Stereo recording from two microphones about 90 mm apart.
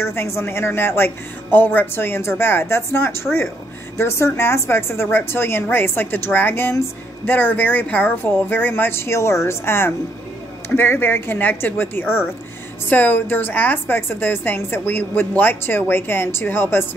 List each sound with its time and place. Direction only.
0.0 s a woman's voice: 30° left (ahead or behind)